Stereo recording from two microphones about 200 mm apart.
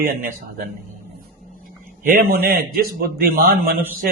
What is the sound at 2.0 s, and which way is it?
A man's voice, 45° right (ahead or behind).